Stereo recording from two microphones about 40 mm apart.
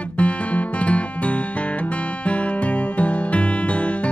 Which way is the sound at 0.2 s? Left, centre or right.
Left.